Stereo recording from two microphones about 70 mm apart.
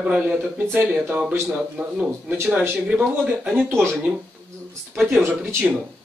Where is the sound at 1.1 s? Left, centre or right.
Centre.